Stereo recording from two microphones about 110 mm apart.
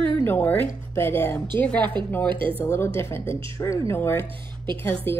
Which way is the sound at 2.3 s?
50° right (ahead or behind).